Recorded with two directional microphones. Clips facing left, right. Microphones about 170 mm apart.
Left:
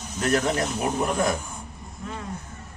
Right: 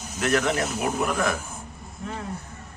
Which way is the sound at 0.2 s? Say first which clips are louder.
Even; 35° left (ahead or behind).